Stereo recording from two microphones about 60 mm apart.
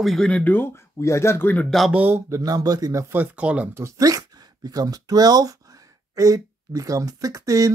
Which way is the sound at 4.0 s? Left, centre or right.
Right.